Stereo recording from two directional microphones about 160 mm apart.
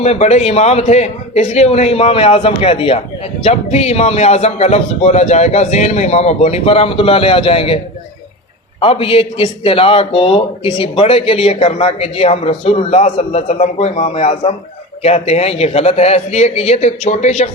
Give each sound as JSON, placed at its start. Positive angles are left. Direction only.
{"t": 0.0, "sound": "a man's voice", "side_deg": 40}
{"t": 8.8, "sound": "a man's voice", "side_deg": 35}